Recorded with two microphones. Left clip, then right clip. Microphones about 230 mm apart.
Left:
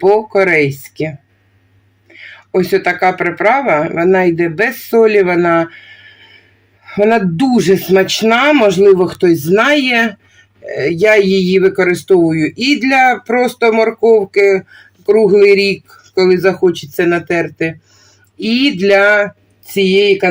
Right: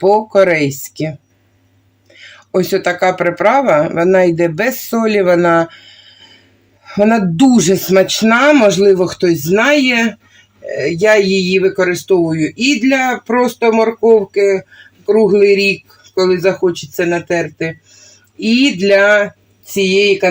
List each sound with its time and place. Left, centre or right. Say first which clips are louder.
0.0 s speech: right 1 dB; centre
2.1 s speech: left 1 dB; centre